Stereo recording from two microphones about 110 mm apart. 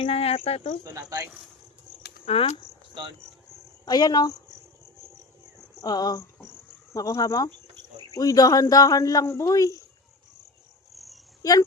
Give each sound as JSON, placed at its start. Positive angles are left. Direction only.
{"t": 0.0, "sound": "speech", "side_deg": 65}
{"t": 0.9, "sound": "speech", "side_deg": -25}
{"t": 2.2, "sound": "speech", "side_deg": 65}
{"t": 2.9, "sound": "speech", "side_deg": -50}
{"t": 3.8, "sound": "speech", "side_deg": 35}
{"t": 5.8, "sound": "speech", "side_deg": 40}
{"t": 10.9, "sound": "cricket", "side_deg": 0}